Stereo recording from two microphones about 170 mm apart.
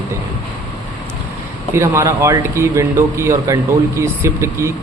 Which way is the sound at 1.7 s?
15° right (ahead or behind).